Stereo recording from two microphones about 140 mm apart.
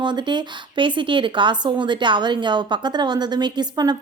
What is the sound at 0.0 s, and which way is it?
A woman's voice, 35° right (ahead or behind).